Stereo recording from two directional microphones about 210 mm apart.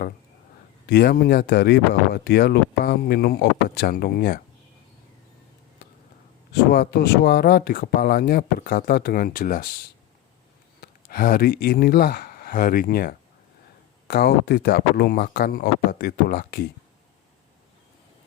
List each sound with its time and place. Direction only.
0.9 s speech: 50° left (ahead or behind)
6.5 s speech: 45° left (ahead or behind)
10.8 s speech: 45° left (ahead or behind)